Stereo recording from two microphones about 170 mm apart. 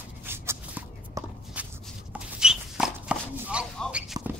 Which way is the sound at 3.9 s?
5° right (ahead or behind).